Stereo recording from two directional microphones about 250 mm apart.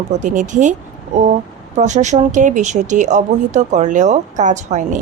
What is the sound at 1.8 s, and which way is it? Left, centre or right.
Speech, right.